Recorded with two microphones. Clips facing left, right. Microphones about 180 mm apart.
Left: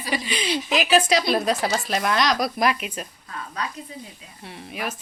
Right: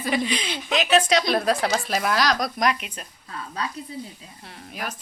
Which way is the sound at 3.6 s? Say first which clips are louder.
Even; 30° right (ahead or behind).